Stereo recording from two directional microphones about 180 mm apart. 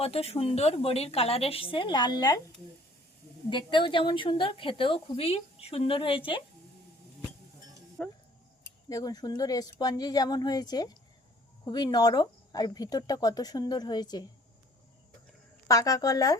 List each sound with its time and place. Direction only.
0.0 s speech: 35° left (ahead or behind)
3.5 s a woman's voice: 25° left (ahead or behind)
8.0 s speech: centre (ahead or behind)
8.6 s a woman's voice: 20° left (ahead or behind)
15.6 s a woman's voice: 20° left (ahead or behind)